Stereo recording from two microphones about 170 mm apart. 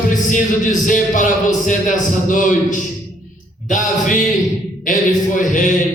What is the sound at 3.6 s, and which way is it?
Speech, 50° left (ahead or behind).